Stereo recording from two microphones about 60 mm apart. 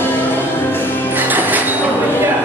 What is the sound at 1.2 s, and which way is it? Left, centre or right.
Music, right.